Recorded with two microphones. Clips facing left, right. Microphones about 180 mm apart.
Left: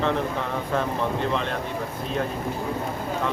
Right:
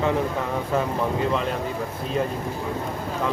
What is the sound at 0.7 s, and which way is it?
Speech, 5° right (ahead or behind).